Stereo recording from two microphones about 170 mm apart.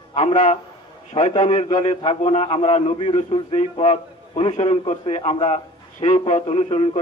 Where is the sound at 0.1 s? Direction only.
40° left (ahead or behind).